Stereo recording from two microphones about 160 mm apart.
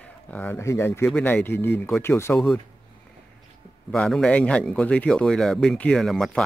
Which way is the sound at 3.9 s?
5° left (ahead or behind).